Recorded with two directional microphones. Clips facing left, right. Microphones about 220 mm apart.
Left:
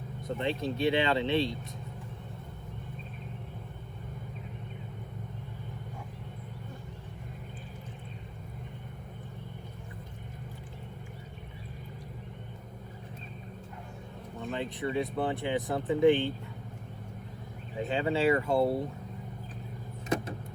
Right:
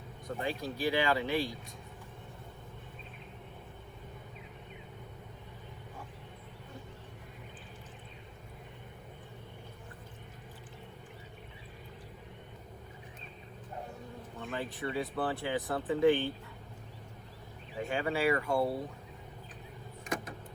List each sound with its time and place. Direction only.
0.3 s speech: 25° left (ahead or behind)
14.5 s speech: 20° left (ahead or behind)
17.8 s speech: 25° left (ahead or behind)
20.1 s vehicle: 25° left (ahead or behind)